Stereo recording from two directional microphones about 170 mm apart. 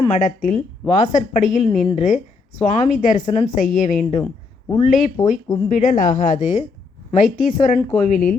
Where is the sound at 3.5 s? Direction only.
50° left (ahead or behind).